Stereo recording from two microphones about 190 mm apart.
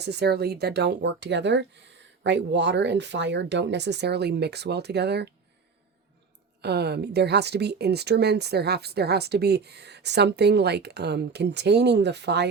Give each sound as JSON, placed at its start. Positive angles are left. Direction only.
{"t": 0.0, "sound": "speech", "side_deg": -60}
{"t": 6.6, "sound": "speech", "side_deg": -60}